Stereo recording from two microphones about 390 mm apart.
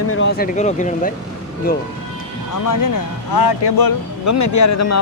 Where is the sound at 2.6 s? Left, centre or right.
Left.